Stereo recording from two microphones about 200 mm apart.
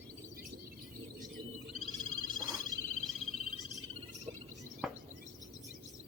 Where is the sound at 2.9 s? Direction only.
35° left (ahead or behind).